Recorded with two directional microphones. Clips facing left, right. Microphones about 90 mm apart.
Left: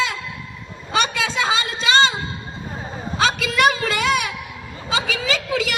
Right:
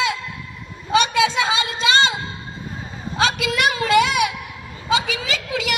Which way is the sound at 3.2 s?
35° left (ahead or behind).